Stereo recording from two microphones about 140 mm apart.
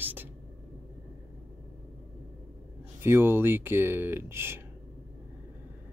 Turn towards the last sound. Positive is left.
turn(degrees=-15)  # may be behind; listen again after turning